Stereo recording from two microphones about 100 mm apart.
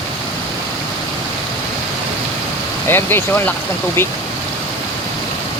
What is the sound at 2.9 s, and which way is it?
Speech, 20° left (ahead or behind).